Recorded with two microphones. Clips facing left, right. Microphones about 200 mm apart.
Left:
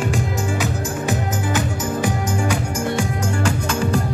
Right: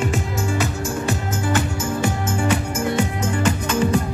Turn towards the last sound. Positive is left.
turn(degrees=-5)  # may be behind; listen again after turning